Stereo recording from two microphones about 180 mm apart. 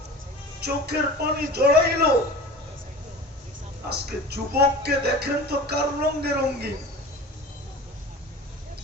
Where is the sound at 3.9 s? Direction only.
65° right (ahead or behind).